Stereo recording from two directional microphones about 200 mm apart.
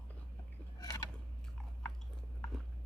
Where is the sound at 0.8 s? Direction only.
15° left (ahead or behind).